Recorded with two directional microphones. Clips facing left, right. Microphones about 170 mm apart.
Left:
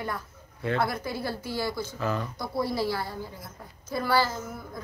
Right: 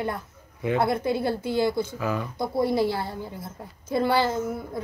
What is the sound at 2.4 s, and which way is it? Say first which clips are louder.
Speech: right 8 dB; 20° right (ahead or behind).